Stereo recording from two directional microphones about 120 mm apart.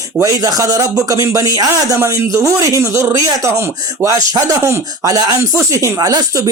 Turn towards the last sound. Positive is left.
turn(degrees=-30)  # may be behind; listen again after turning